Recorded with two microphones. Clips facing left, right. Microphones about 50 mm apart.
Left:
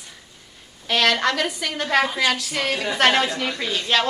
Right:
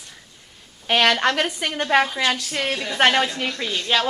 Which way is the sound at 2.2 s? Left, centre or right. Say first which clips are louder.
Left 1 dB; centre.